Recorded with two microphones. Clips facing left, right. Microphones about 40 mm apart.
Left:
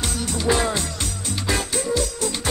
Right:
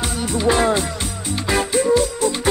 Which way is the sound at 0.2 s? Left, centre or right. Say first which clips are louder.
Right 4 dB; centre.